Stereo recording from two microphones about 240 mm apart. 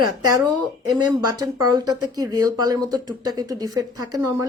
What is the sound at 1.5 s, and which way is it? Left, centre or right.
Speech, centre.